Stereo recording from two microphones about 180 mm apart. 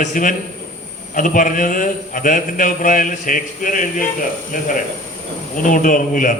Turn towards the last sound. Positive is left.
turn(degrees=45)  # may be behind; listen again after turning